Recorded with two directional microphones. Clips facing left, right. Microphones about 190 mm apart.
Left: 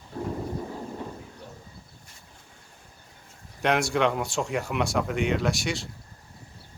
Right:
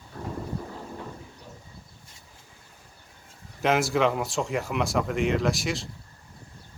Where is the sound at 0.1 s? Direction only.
25° left (ahead or behind).